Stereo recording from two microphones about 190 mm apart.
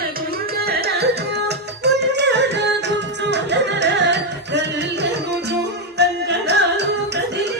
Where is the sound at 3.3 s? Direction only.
65° right (ahead or behind).